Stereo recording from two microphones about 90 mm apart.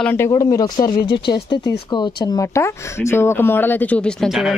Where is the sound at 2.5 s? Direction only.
30° left (ahead or behind).